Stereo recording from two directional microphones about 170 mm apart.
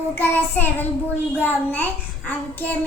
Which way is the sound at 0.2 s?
10° left (ahead or behind).